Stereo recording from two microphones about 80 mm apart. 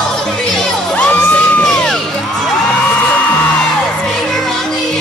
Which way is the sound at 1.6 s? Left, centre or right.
Centre.